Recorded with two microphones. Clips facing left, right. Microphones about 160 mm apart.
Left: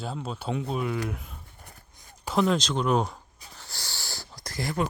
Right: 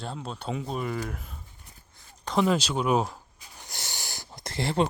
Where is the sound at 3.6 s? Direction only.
20° right (ahead or behind).